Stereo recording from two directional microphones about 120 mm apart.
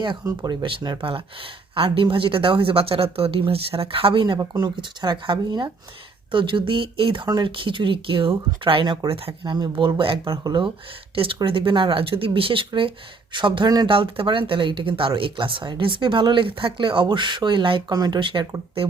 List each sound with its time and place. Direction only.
0.6 s speech: 40° right (ahead or behind)